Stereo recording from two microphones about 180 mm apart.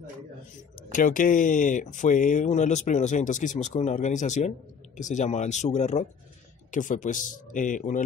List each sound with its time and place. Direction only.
0.9 s speech: 50° left (ahead or behind)